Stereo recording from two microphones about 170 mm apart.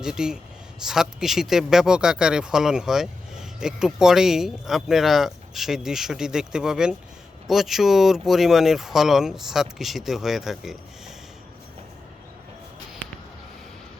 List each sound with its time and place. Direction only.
0.0 s speech: 5° right (ahead or behind)